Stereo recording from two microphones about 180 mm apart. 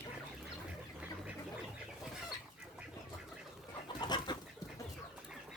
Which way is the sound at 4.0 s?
25° left (ahead or behind).